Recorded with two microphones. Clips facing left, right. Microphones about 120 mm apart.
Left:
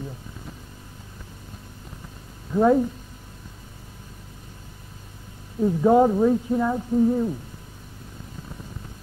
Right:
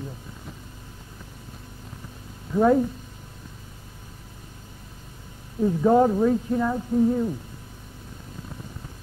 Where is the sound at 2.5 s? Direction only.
5° left (ahead or behind).